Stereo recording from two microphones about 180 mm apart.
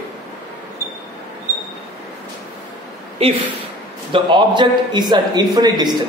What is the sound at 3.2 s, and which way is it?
A man's voice, 35° right (ahead or behind).